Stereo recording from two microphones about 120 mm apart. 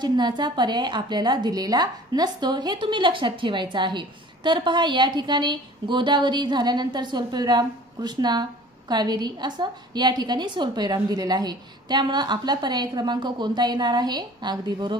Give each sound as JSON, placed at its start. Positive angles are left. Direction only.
{"t": 0.0, "sound": "a woman's voice", "side_deg": -35}